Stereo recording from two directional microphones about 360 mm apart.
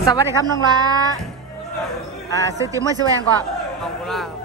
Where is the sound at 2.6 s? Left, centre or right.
Centre.